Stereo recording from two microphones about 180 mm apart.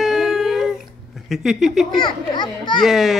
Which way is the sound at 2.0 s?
25° left (ahead or behind).